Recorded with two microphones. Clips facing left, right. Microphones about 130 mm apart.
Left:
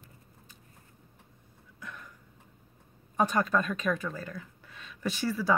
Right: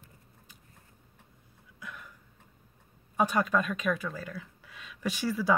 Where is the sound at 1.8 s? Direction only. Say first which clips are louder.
Even; 5° right (ahead or behind).